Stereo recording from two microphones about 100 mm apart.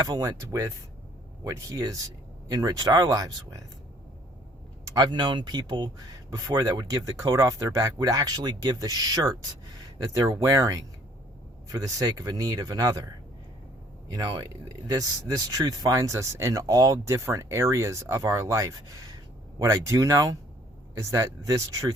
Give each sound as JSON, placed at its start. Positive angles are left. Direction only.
{"t": 0.0, "sound": "speech", "side_deg": -40}
{"t": 4.9, "sound": "speech", "side_deg": -45}
{"t": 14.1, "sound": "speech", "side_deg": -45}